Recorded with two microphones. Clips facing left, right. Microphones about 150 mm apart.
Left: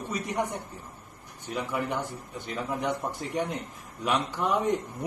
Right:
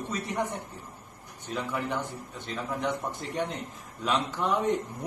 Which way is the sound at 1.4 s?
10° left (ahead or behind).